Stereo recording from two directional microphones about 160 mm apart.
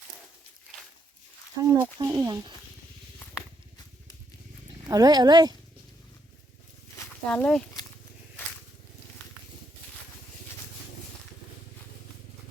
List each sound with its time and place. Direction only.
1.6 s speech: 20° right (ahead or behind)
4.9 s speech: 25° right (ahead or behind)
7.3 s speech: 5° left (ahead or behind)